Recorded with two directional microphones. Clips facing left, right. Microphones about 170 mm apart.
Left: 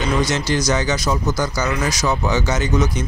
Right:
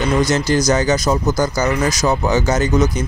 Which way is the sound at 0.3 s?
40° right (ahead or behind).